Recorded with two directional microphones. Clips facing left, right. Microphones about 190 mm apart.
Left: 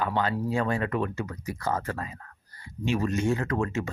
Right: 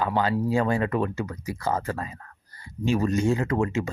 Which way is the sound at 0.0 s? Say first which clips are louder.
Right 3 dB; 30° right (ahead or behind).